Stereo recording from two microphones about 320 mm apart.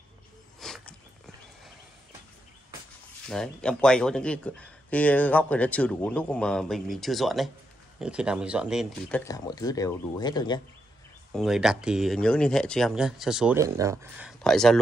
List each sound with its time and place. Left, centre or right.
0.6 s a sound: centre
3.3 s speech: centre
9.2 s speech: centre
11.3 s speech: centre